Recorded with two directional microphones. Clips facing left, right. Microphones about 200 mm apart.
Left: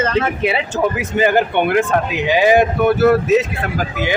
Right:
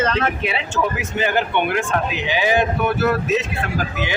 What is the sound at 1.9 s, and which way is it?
Speech, 45° left (ahead or behind).